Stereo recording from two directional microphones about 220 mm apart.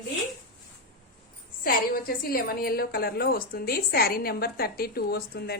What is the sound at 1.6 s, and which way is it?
A woman's voice, 40° left (ahead or behind).